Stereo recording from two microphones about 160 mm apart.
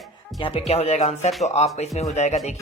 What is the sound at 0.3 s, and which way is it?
Speech, 30° left (ahead or behind).